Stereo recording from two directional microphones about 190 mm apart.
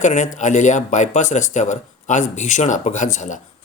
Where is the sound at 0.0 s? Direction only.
40° left (ahead or behind).